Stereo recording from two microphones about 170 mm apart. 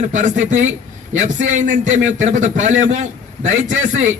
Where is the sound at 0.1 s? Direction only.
45° right (ahead or behind).